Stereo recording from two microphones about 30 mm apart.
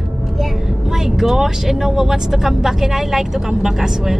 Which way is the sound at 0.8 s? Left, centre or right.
Centre.